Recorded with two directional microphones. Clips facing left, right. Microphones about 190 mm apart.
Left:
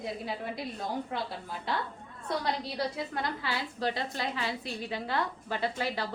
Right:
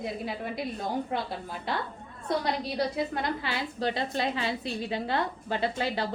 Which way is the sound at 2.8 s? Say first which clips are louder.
Right 4 dB; 20° right (ahead or behind).